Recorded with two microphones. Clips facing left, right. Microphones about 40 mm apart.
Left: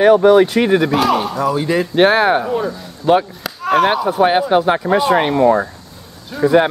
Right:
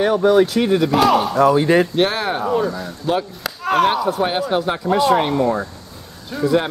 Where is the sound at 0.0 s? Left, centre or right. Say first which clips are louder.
Left 5 dB; left.